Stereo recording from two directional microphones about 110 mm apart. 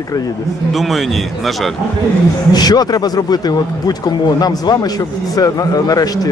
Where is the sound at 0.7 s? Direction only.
Centre (ahead or behind).